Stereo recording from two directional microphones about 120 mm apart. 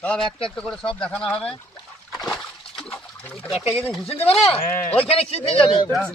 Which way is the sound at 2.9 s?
20° left (ahead or behind).